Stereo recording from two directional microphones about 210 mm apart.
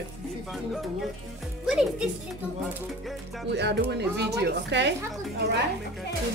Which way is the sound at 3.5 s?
50° right (ahead or behind).